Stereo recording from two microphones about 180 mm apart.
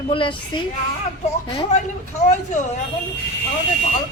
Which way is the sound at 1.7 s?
40° left (ahead or behind).